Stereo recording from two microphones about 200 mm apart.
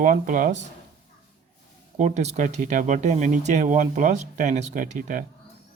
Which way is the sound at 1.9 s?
35° right (ahead or behind).